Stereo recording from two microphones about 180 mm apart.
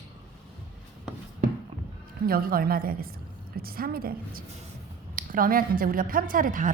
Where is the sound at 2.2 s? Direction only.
55° right (ahead or behind).